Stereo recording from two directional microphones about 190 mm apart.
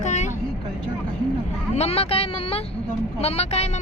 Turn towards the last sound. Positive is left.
turn(degrees=35)  # may be behind; listen again after turning